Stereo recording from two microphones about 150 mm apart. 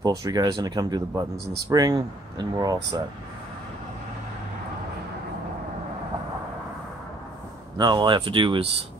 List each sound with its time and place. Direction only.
0.0 s speech: 25° right (ahead or behind)
1.3 s speech: 90° right
1.7 s speech: 25° right (ahead or behind)
7.7 s speech: 30° right (ahead or behind)